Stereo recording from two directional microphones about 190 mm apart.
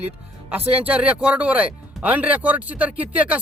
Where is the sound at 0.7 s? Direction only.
10° right (ahead or behind).